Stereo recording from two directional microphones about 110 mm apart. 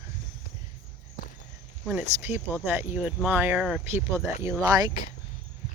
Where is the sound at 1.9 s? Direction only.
15° right (ahead or behind).